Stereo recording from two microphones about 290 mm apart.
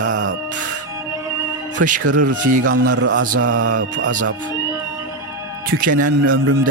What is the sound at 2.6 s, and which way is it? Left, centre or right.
A man's voice, right.